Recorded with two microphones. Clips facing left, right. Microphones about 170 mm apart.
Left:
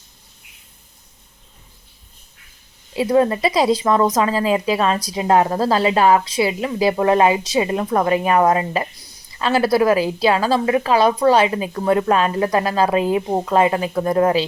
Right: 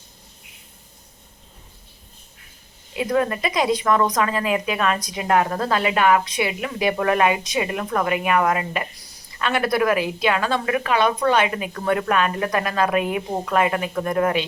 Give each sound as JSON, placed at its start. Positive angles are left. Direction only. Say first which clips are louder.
{"t": 2.9, "sound": "a woman's voice", "louder": "left 5 dB", "side_deg": 30}